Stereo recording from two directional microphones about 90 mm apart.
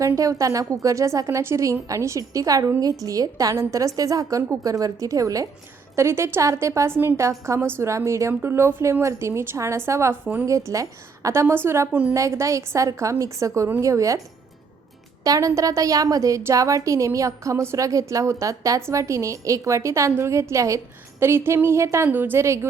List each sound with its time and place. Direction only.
0.0 s a woman's voice: 40° right (ahead or behind)
11.9 s a woman's voice: 15° right (ahead or behind)
12.1 s a woman's voice: 35° right (ahead or behind)
15.2 s a woman's voice: 40° right (ahead or behind)